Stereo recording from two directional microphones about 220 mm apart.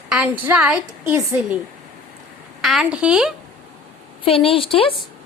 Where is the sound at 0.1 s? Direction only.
5° right (ahead or behind).